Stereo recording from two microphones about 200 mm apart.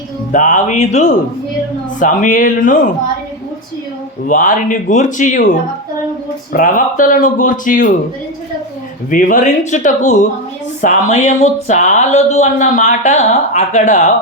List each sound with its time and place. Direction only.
0.3 s speech: 40° left (ahead or behind)
4.3 s speech: 40° left (ahead or behind)
9.0 s speech: 40° left (ahead or behind)